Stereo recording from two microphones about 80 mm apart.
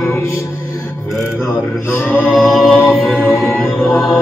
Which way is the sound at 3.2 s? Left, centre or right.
Centre.